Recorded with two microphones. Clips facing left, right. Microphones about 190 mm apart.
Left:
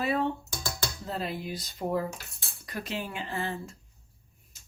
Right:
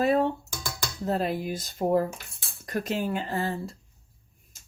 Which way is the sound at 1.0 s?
50° right (ahead or behind).